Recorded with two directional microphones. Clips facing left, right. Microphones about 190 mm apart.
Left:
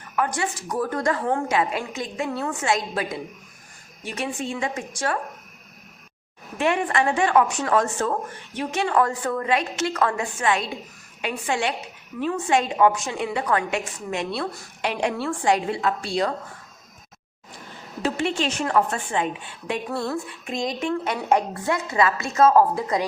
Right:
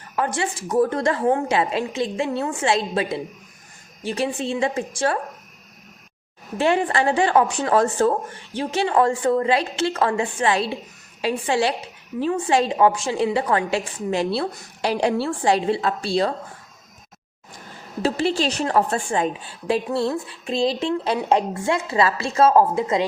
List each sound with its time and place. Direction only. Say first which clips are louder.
0.2 s a woman's voice: right 1 dB; 30° right (ahead or behind)
6.6 s a woman's voice: right 2 dB; 30° right (ahead or behind)
18.0 s a woman's voice: right 3 dB; 35° right (ahead or behind)